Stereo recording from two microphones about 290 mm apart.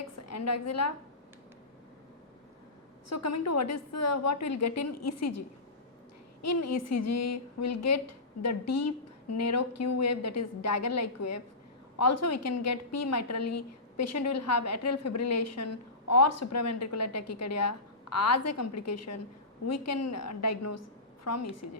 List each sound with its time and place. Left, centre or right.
0.3 s a woman's voice: left
3.1 s a woman's voice: left
6.4 s a woman's voice: left